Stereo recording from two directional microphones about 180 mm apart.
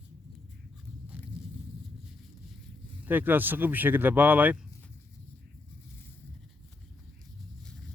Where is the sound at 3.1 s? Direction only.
10° right (ahead or behind).